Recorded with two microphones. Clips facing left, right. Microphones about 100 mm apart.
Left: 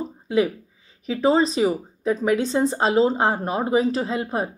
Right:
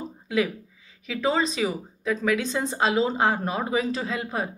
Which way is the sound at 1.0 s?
30° left (ahead or behind).